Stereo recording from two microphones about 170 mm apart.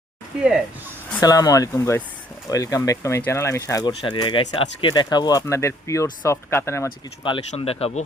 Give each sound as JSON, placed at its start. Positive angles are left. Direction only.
{"t": 1.2, "sound": "speech", "side_deg": 20}
{"t": 7.3, "sound": "speech", "side_deg": 35}